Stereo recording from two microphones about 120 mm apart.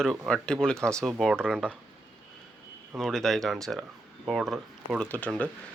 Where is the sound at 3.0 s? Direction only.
5° left (ahead or behind).